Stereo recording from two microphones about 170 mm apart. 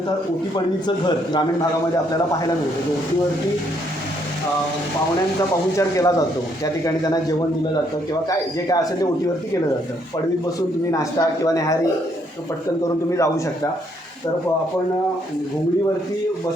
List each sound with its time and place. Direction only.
0.5 s speech: 25° left (ahead or behind)
5.7 s speech: 20° left (ahead or behind)
10.9 s speech: 20° left (ahead or behind)
13.1 s a man's voice: 20° left (ahead or behind)